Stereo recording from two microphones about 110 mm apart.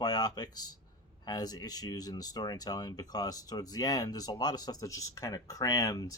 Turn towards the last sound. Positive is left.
turn(degrees=30)  # may be behind; listen again after turning